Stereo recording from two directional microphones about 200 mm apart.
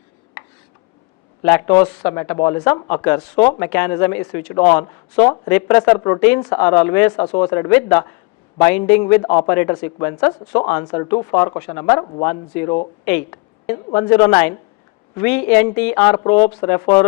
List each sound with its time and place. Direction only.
1.5 s a man's voice: 10° left (ahead or behind)
16.1 s speech: 20° left (ahead or behind)